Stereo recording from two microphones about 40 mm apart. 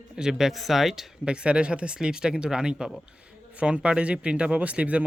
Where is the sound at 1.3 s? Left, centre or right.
Right.